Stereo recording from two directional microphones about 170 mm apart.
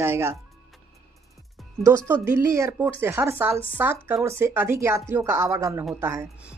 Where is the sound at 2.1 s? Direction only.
15° right (ahead or behind).